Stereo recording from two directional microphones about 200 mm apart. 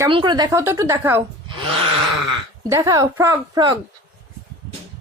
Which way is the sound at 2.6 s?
15° right (ahead or behind).